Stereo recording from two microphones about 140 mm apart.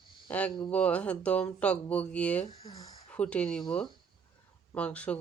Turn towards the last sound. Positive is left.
turn(degrees=10)  # may be behind; listen again after turning